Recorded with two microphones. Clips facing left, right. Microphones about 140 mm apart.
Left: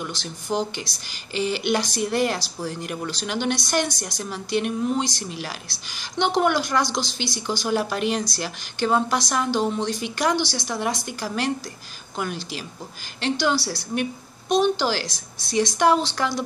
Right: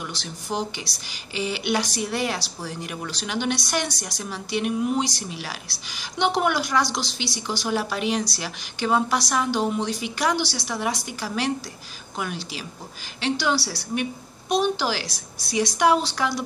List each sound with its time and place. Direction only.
0.0 s speech: centre (ahead or behind)
15.0 s a woman's voice: 90° left
15.5 s a woman's voice: 5° right (ahead or behind)